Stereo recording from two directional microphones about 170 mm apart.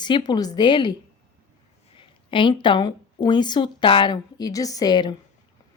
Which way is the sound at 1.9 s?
30° left (ahead or behind).